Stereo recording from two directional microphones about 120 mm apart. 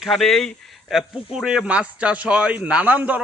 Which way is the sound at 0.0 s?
Centre (ahead or behind).